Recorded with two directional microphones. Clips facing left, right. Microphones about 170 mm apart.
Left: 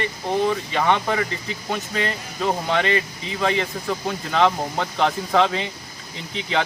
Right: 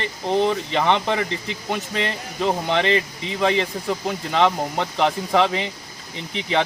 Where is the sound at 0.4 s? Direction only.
25° right (ahead or behind).